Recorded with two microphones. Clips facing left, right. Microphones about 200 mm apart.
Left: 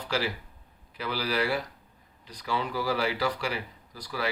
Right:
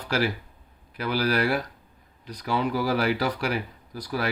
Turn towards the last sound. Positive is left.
turn(degrees=-55)  # may be behind; listen again after turning